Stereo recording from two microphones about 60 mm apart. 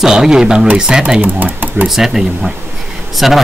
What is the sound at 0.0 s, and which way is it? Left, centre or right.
Speech, centre.